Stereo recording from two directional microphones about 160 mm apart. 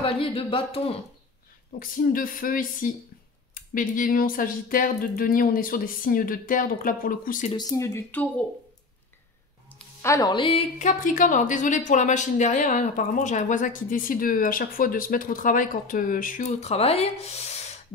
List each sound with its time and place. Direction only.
0.0 s speech: 35° left (ahead or behind)
1.8 s speech: 60° left (ahead or behind)
7.5 s speech: 20° left (ahead or behind)
9.7 s a sound: 15° left (ahead or behind)
10.3 s a woman's voice: 30° left (ahead or behind)
10.8 s a woman's voice: 50° left (ahead or behind)